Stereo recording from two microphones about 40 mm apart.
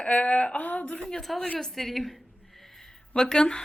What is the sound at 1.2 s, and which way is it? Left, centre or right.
Speech, centre.